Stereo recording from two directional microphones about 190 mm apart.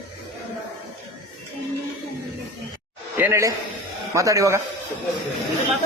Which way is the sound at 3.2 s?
15° right (ahead or behind).